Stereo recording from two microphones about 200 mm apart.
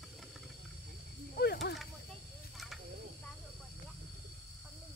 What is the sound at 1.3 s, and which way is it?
Snake, 55° left (ahead or behind).